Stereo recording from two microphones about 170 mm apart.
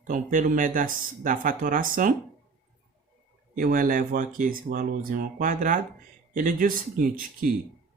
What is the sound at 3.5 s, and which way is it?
Speech, 50° right (ahead or behind).